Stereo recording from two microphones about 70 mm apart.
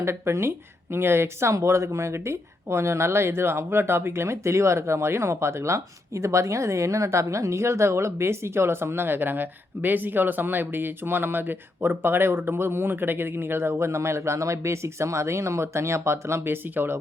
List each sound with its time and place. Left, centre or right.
0.0 s speech: right